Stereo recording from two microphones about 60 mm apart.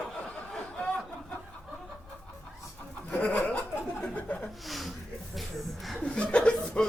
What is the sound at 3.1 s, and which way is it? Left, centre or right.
Chuckle, left.